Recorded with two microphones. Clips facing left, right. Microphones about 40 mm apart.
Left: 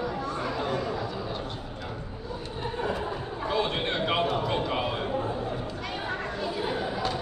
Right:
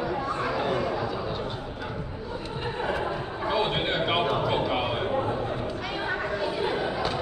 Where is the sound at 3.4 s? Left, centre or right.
Centre.